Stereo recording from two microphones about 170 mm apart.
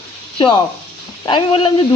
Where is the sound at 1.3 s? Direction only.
30° left (ahead or behind).